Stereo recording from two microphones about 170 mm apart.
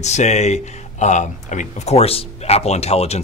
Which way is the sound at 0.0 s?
40° left (ahead or behind).